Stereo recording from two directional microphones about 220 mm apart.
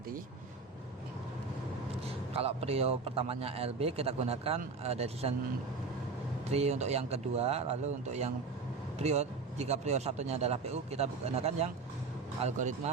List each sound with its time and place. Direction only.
2.3 s speech: 25° right (ahead or behind)
6.5 s speech: 30° right (ahead or behind)